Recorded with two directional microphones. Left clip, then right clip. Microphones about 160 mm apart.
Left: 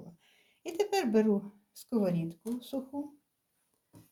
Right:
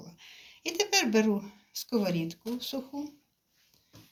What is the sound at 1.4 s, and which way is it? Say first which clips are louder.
Speech: right 11 dB; 70° left (ahead or behind).